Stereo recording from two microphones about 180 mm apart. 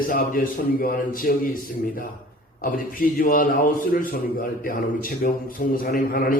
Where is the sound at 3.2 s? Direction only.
50° left (ahead or behind).